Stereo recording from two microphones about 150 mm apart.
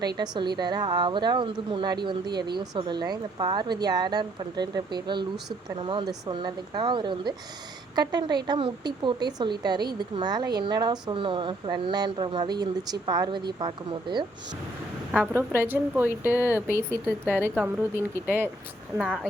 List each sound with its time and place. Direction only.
0.2 s a woman's voice: 30° right (ahead or behind)
15.1 s a woman's voice: 10° right (ahead or behind)
18.9 s speech: 5° right (ahead or behind)